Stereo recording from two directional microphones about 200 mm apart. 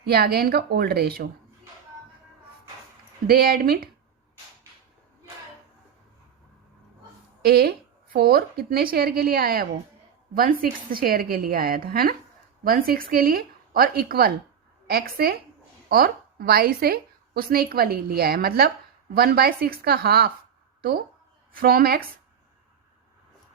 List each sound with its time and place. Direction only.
0.0 s a woman's voice: 50° right (ahead or behind)
3.2 s a woman's voice: 50° right (ahead or behind)
7.4 s a woman's voice: 50° right (ahead or behind)
21.5 s a woman's voice: 50° right (ahead or behind)